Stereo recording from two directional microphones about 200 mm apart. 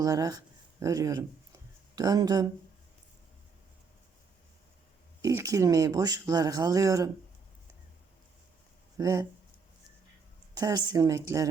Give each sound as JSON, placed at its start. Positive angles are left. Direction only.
{"t": 0.0, "sound": "speech", "side_deg": -20}
{"t": 5.2, "sound": "speech", "side_deg": -15}
{"t": 9.0, "sound": "speech", "side_deg": -15}
{"t": 10.5, "sound": "speech", "side_deg": -20}